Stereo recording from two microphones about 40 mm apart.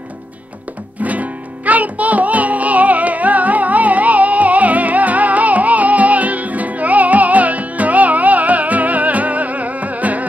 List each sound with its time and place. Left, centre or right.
1.0 s music: right